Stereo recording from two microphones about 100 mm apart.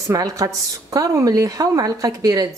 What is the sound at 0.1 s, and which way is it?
A woman's voice, 35° right (ahead or behind).